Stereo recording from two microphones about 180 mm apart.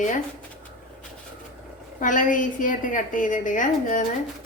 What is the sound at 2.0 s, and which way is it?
A woman's voice, 45° left (ahead or behind).